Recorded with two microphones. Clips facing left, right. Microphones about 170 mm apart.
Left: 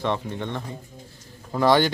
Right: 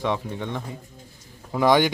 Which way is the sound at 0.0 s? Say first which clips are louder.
Even; 10° right (ahead or behind).